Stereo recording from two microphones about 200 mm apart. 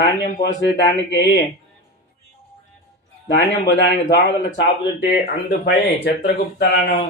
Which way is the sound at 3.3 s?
60° left (ahead or behind).